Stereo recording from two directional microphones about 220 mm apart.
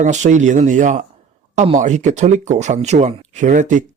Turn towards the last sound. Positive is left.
turn(degrees=-35)  # may be behind; listen again after turning